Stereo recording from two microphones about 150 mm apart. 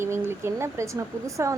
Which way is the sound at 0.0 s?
15° right (ahead or behind).